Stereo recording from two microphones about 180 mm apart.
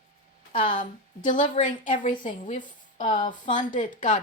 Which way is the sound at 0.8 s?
50° left (ahead or behind).